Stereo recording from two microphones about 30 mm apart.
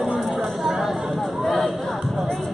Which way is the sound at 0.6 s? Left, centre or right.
Centre.